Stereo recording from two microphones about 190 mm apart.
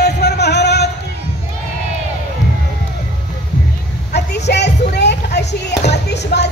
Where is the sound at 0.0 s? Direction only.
60° left (ahead or behind).